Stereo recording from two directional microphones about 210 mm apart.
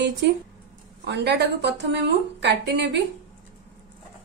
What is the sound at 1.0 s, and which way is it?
A woman's voice, 55° right (ahead or behind).